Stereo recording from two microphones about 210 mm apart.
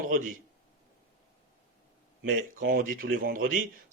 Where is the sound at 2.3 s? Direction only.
40° right (ahead or behind).